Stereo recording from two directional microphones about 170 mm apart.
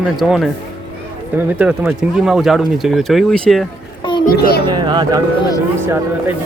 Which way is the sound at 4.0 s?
25° left (ahead or behind).